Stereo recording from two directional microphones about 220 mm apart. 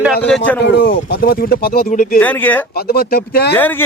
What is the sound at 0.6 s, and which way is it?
Speech, 50° left (ahead or behind).